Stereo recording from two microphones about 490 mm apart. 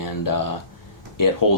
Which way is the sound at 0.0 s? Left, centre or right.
Left.